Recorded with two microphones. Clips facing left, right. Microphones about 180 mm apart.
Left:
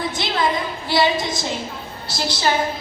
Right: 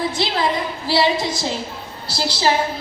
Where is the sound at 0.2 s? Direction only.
30° right (ahead or behind).